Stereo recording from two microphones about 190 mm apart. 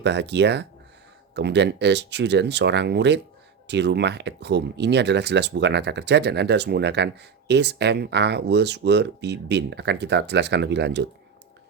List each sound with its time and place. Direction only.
0.0 s speech: 65° right (ahead or behind)